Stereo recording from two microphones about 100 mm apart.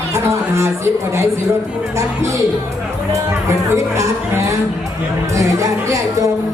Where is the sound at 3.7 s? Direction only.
30° right (ahead or behind).